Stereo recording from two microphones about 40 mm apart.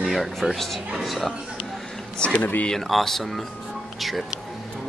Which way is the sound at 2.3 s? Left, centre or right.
Left.